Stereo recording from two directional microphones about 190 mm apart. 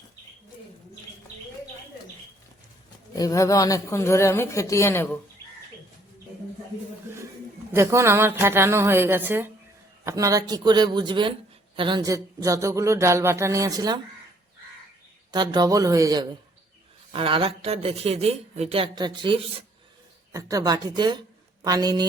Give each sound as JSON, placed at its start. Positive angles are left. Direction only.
{"t": 3.2, "sound": "speech", "side_deg": 20}
{"t": 7.7, "sound": "speech", "side_deg": -15}
{"t": 15.3, "sound": "a woman's voice", "side_deg": -20}